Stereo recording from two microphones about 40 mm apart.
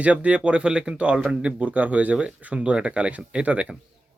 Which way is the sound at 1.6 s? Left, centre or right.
Right.